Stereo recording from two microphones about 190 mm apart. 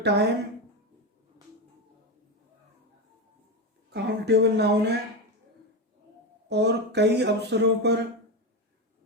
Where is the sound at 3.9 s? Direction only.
60° right (ahead or behind).